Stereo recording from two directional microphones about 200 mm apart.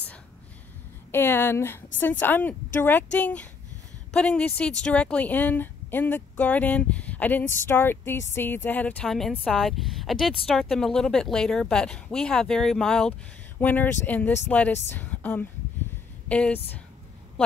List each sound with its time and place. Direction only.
1.1 s a woman's voice: 10° left (ahead or behind)